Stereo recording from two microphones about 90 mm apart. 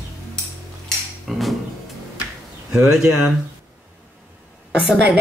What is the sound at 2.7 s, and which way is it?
Speech, 10° right (ahead or behind).